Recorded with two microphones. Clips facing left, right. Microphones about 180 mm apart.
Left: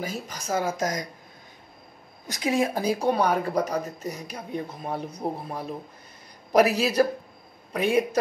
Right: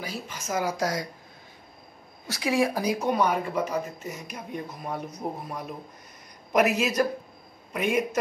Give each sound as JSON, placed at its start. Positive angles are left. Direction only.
{"t": 0.0, "sound": "speech", "side_deg": 40}
{"t": 2.2, "sound": "speech", "side_deg": 20}